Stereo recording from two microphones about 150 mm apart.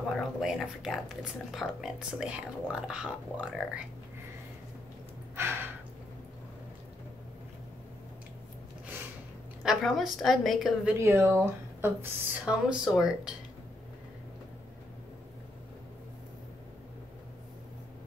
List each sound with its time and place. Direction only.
0.1 s speech: centre (ahead or behind)
5.3 s gasp: 15° right (ahead or behind)
9.6 s speech: centre (ahead or behind)
11.0 s speech: 15° right (ahead or behind)